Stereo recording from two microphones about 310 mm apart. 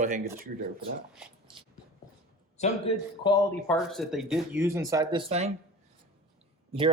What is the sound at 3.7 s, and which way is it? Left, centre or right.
Speech, centre.